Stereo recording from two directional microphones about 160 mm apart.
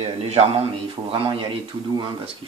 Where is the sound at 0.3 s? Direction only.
35° right (ahead or behind).